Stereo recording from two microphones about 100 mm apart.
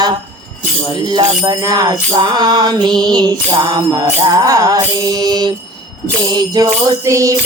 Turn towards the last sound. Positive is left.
turn(degrees=-35)  # may be behind; listen again after turning